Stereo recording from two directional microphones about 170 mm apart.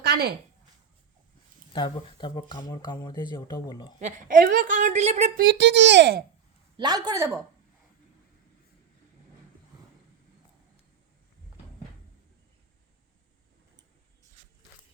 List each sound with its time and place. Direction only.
0.0 s a sound: 70° right (ahead or behind)
1.7 s speech: 25° left (ahead or behind)
4.0 s a woman's voice: 50° right (ahead or behind); by 6.2 s 80° right
6.7 s speech: 25° right (ahead or behind)